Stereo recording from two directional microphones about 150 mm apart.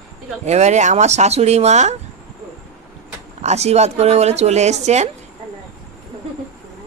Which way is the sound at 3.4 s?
45° right (ahead or behind).